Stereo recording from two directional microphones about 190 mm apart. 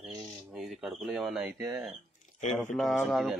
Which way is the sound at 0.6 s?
Centre (ahead or behind).